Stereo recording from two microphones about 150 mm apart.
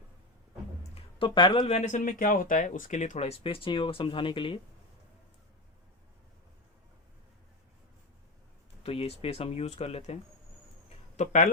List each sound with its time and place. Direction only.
0.9 s speech: 35° left (ahead or behind)
8.8 s speech: 40° left (ahead or behind)
11.2 s a man's voice: 55° left (ahead or behind)